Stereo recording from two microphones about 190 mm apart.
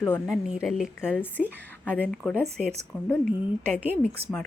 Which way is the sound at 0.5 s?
5° right (ahead or behind).